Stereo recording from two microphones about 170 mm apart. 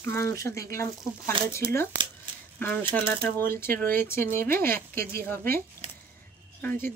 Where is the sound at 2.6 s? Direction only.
10° left (ahead or behind).